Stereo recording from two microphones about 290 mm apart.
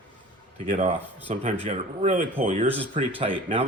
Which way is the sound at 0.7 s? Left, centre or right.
Right.